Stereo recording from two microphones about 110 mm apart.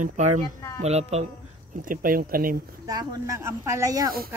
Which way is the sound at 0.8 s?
80° right.